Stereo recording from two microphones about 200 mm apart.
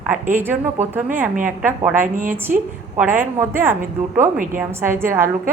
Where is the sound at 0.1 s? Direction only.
10° right (ahead or behind).